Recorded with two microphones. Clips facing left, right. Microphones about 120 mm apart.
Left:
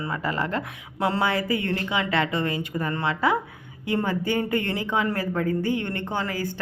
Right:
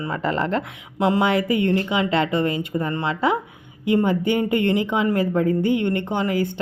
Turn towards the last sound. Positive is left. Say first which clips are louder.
# right 6 dB
turn(degrees=-20)  # may be behind; listen again after turning